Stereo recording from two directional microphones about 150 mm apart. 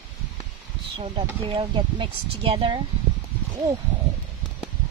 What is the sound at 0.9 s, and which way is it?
Speech, 35° right (ahead or behind).